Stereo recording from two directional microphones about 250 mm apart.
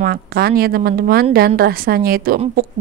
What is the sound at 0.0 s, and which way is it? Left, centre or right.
Speech, right.